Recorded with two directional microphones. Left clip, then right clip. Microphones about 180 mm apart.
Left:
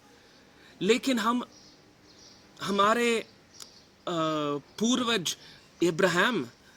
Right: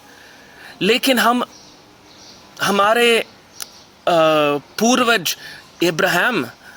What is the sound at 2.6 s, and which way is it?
Speech, 15° left (ahead or behind).